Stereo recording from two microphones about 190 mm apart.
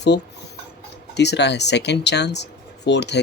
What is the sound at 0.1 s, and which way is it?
Speech, 60° left (ahead or behind).